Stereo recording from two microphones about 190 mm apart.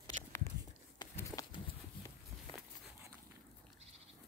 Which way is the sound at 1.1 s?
15° left (ahead or behind).